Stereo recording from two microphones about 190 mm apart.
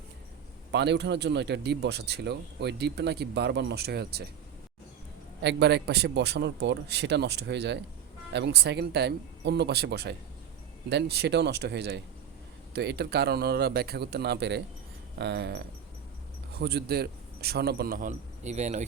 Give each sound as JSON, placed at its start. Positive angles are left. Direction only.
{"t": 0.7, "sound": "speech", "side_deg": -65}
{"t": 5.4, "sound": "speech", "side_deg": -60}